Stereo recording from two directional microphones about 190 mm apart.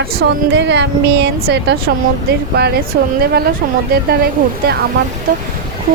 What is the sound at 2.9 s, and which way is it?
Speech, 50° right (ahead or behind).